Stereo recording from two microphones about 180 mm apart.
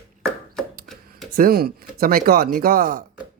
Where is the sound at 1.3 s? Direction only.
55° right (ahead or behind).